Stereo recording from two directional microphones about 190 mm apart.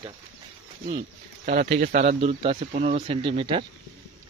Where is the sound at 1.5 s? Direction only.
55° right (ahead or behind).